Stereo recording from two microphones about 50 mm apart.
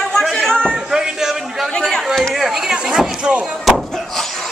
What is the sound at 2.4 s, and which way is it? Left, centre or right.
Speech, centre.